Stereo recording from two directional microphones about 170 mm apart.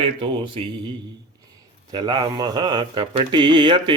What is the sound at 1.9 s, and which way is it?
Speech, 25° right (ahead or behind).